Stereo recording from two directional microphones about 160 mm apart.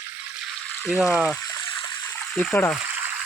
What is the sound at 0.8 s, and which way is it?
Speech, centre (ahead or behind).